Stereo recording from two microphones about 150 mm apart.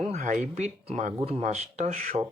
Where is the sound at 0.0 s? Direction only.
50° right (ahead or behind).